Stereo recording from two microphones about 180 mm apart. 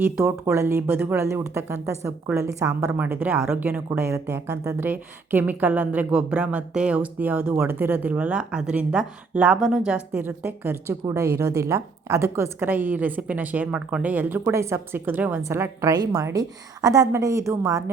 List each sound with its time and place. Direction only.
0.0 s speech: 10° right (ahead or behind)